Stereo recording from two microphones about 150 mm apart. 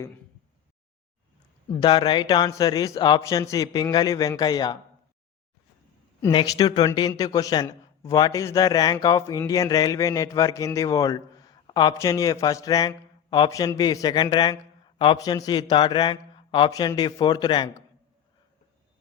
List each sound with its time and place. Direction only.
1.8 s a man's voice: 30° left (ahead or behind)
6.3 s a man's voice: 25° left (ahead or behind)